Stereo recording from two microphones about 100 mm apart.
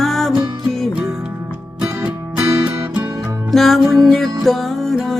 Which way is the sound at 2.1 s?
20° right (ahead or behind).